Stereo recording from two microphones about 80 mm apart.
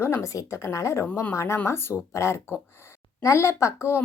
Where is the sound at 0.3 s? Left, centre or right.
Left.